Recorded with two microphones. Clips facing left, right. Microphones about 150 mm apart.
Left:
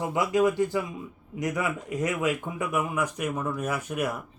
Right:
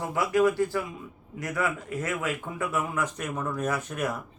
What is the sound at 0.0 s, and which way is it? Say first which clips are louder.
Speech: even; 20° left (ahead or behind).